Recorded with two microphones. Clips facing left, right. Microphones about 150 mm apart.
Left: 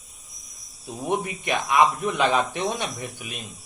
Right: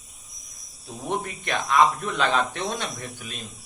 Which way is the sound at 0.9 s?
15° left (ahead or behind).